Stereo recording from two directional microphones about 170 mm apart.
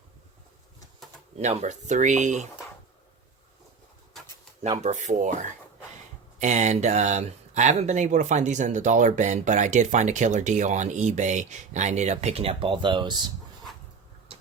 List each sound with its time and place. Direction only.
1.4 s speech: 45° right (ahead or behind)
4.8 s speech: 45° right (ahead or behind); by 13.3 s 25° right (ahead or behind)